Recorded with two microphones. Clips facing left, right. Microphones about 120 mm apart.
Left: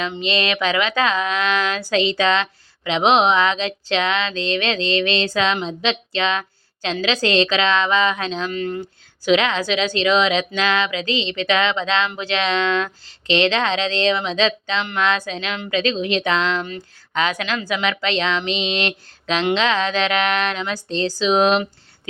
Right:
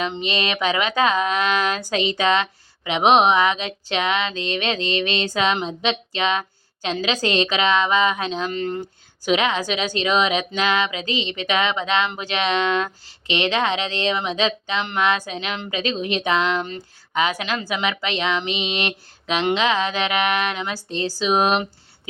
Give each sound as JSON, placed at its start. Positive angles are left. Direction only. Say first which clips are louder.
{"t": 0.3, "sound": "speech", "louder": "left 3 dB", "side_deg": -15}